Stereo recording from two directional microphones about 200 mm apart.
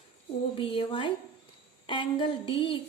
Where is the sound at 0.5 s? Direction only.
25° left (ahead or behind).